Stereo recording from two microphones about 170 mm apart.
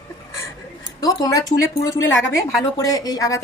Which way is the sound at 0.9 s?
20° left (ahead or behind).